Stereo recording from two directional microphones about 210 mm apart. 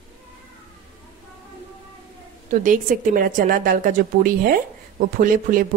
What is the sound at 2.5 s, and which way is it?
A woman's voice, 40° right (ahead or behind).